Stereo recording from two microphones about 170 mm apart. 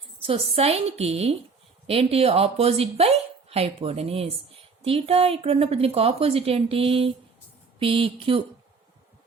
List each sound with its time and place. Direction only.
0.2 s a woman's voice: 35° right (ahead or behind)